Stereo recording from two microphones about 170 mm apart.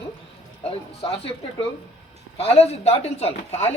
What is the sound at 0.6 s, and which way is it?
Speech, 35° left (ahead or behind).